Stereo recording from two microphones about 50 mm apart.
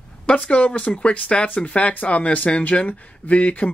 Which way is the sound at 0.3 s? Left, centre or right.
Left.